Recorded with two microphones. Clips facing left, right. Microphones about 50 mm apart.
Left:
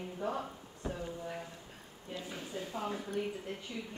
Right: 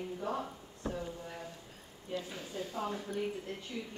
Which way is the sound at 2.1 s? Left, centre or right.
Left.